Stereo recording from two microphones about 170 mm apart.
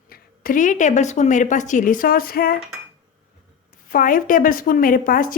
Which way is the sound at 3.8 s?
55° left (ahead or behind).